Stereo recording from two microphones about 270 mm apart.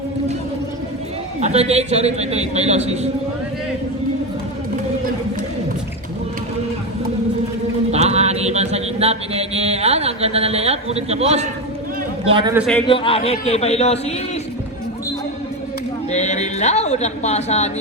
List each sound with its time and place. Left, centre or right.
1.4 s a man's voice: right
7.9 s a sound: right
12.3 s a man's voice: centre
12.5 s a man's voice: centre
12.9 s a man's voice: centre
16.1 s speech: left